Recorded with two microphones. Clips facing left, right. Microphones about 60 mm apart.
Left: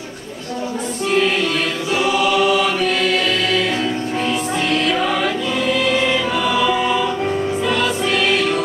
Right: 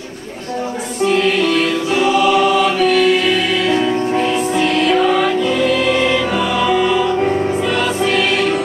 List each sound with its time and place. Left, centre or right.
1.2 s choir: centre
4.2 s music: centre
5.9 s choir: centre
7.6 s music: centre